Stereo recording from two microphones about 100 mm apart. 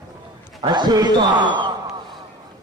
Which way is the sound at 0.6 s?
45° right (ahead or behind).